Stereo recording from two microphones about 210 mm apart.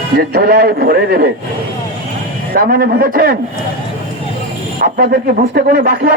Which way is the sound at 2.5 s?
45° right (ahead or behind).